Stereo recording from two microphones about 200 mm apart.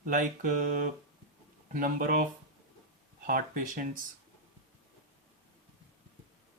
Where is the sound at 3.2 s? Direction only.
45° right (ahead or behind).